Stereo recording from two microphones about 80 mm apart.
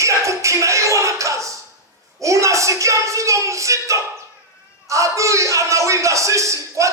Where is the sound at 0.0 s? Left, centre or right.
Right.